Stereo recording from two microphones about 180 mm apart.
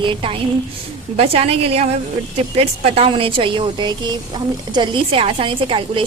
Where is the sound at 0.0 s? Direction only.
30° right (ahead or behind).